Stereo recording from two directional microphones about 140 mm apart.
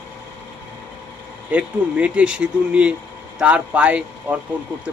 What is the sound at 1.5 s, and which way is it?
A man's voice, 10° right (ahead or behind).